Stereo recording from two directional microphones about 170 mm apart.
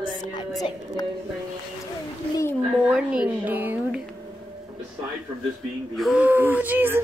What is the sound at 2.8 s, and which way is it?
Speech, 5° right (ahead or behind).